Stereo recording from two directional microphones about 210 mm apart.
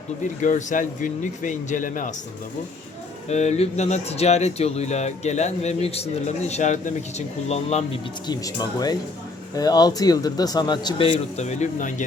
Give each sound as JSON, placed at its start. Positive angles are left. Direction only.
{"t": 0.4, "sound": "speech", "side_deg": 35}
{"t": 3.2, "sound": "speech", "side_deg": 30}
{"t": 8.3, "sound": "a man's voice", "side_deg": 20}